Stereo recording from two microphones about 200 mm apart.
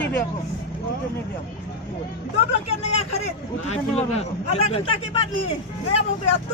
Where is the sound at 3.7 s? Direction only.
30° left (ahead or behind).